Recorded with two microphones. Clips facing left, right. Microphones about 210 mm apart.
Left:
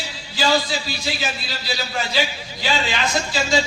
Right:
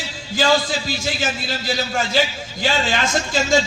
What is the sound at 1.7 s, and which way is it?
A man's voice, 50° right (ahead or behind).